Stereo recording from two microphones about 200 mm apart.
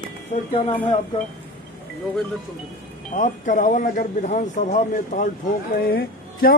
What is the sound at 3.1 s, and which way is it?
A man's voice, 40° left (ahead or behind).